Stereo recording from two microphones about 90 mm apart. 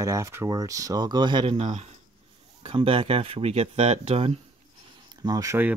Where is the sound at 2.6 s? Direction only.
90° right.